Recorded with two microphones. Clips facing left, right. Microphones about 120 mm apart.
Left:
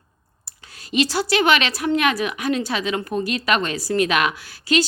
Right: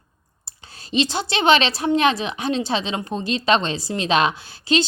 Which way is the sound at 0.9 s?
25° right (ahead or behind).